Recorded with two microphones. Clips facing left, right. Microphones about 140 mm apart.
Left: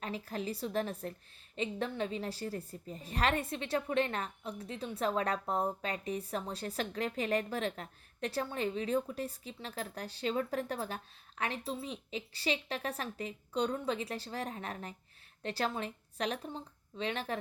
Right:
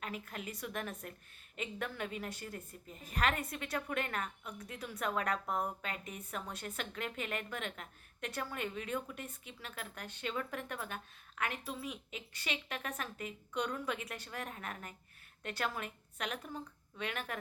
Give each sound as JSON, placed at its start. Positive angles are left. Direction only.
{"t": 0.0, "sound": "a woman's voice", "side_deg": 30}